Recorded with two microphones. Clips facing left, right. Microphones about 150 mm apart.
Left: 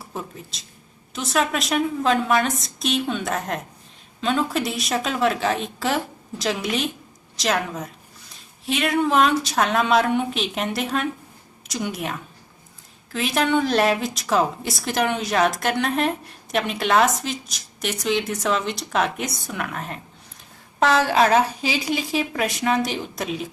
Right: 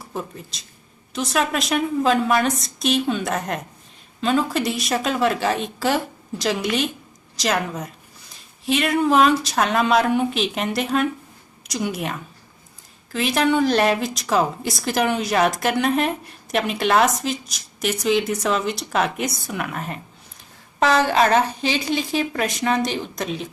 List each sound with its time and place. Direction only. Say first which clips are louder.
0.0 s a woman's voice: right 2 dB; centre (ahead or behind)